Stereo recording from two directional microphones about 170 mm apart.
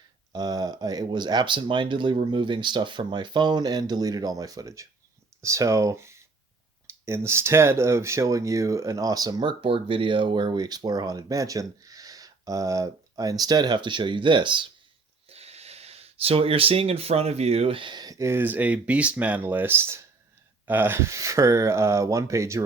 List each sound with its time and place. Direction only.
0.3 s speech: 25° right (ahead or behind)